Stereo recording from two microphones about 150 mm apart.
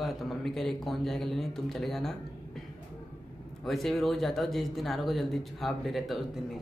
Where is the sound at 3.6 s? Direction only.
Centre (ahead or behind).